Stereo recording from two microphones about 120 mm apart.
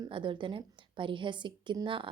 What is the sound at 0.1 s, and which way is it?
A woman's voice, 45° right (ahead or behind).